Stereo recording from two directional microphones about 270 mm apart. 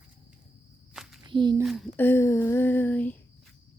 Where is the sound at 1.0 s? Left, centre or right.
Centre.